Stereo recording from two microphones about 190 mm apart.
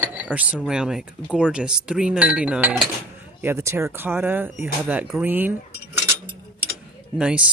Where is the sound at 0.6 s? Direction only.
5° right (ahead or behind).